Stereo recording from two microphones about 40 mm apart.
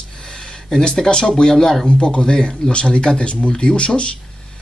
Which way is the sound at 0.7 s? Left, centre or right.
Centre.